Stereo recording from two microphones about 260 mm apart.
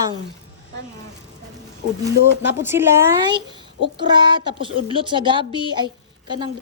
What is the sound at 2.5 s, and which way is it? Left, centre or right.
Speech, centre.